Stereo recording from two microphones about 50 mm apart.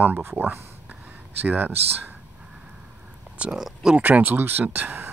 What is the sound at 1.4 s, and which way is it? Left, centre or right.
Speech, right.